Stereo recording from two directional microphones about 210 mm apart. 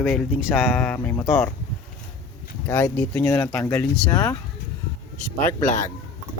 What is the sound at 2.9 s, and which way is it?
Speech, 10° left (ahead or behind).